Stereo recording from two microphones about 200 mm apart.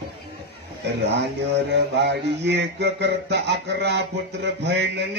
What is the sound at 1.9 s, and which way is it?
Music, 60° right (ahead or behind).